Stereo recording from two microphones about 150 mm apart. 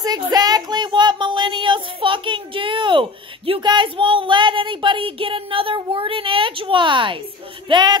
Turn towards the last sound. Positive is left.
turn(degrees=-30)  # may be behind; listen again after turning